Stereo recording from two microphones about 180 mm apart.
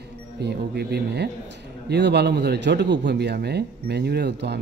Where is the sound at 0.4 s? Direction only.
65° right (ahead or behind).